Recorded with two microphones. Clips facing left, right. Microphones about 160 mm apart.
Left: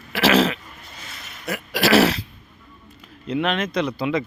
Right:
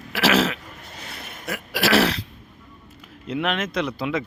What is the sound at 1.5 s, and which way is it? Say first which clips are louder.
Speech: left 3 dB; centre (ahead or behind).